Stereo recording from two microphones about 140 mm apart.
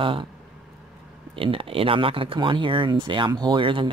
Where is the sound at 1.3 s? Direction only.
40° right (ahead or behind).